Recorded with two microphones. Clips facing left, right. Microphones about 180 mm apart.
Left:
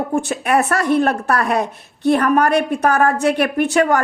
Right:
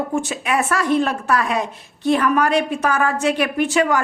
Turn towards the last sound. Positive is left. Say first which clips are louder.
# left 2 dB
turn(degrees=55)  # may be behind; listen again after turning